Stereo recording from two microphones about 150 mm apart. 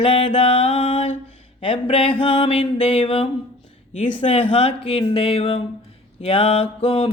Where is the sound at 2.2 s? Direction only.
40° left (ahead or behind).